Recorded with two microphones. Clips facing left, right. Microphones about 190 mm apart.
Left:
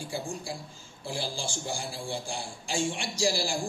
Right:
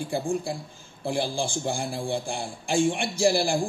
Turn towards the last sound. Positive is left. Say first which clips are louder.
# right 6 dB
turn(degrees=-55)  # may be behind; listen again after turning